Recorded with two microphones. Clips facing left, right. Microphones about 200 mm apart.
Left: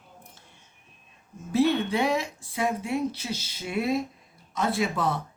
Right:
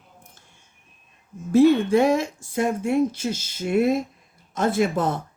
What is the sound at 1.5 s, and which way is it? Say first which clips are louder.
Speech: right 7 dB; 45° right (ahead or behind).